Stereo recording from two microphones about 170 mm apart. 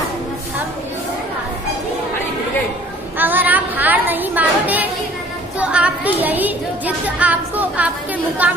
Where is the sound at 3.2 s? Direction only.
10° right (ahead or behind).